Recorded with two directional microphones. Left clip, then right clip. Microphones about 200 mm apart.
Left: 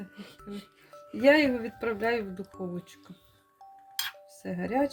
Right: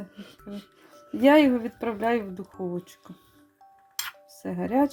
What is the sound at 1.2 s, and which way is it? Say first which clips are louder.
Speech: right 3 dB; 30° right (ahead or behind).